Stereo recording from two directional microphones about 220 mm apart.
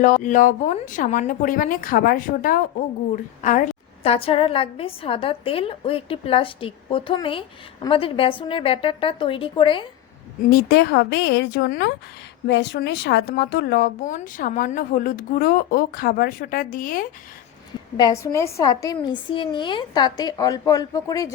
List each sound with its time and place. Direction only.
0.0 s a woman's voice: 35° left (ahead or behind)
10.5 s a woman's voice: 45° left (ahead or behind)
17.9 s a woman's voice: 15° left (ahead or behind)